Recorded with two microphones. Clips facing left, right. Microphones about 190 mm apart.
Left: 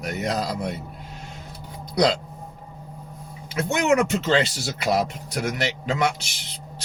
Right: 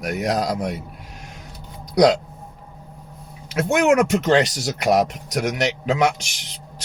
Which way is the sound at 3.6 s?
65° right (ahead or behind).